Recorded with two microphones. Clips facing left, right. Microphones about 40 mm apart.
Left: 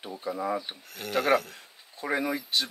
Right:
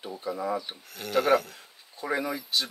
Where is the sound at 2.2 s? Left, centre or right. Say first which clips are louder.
Left 4 dB; centre.